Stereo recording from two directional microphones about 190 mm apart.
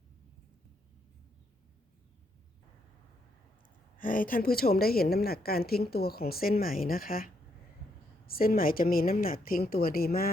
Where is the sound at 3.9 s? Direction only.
45° left (ahead or behind).